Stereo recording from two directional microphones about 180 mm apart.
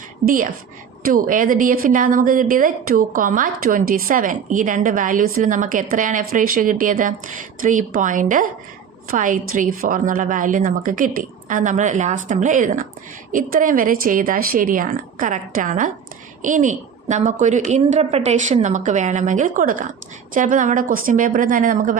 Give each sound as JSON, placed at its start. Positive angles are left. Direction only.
{"t": 0.3, "sound": "a woman's voice", "side_deg": -50}